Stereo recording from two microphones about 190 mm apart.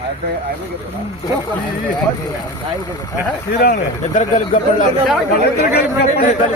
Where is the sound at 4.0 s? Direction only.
45° left (ahead or behind).